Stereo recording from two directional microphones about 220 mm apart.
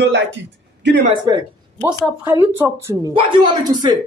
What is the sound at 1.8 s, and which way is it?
A woman's voice, 5° right (ahead or behind).